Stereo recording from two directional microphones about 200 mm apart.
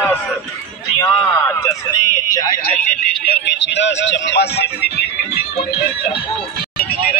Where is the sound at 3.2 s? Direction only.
55° left (ahead or behind).